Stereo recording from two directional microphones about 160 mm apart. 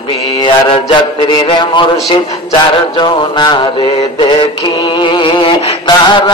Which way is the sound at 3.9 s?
30° left (ahead or behind).